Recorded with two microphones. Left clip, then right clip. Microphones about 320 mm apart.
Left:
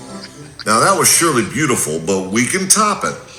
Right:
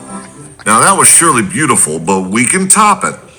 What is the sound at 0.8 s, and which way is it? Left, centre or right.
Speech, centre.